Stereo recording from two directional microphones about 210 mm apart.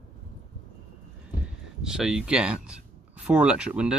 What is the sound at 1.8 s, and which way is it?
Speech, 5° right (ahead or behind).